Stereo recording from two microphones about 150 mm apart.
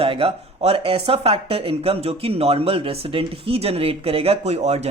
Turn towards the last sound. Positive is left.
turn(degrees=-45)  # may be behind; listen again after turning